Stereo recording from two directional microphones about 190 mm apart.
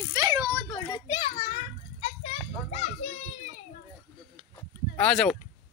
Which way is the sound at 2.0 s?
30° left (ahead or behind).